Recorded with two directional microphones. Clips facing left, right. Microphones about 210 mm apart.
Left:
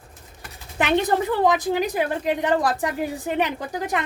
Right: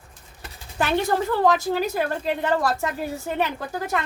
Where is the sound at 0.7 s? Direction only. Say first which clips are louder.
Left 2 dB; 20° left (ahead or behind).